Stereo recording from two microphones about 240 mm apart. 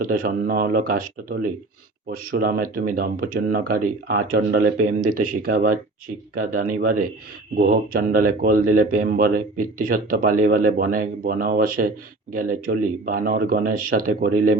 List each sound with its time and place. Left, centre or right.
0.0 s speech: right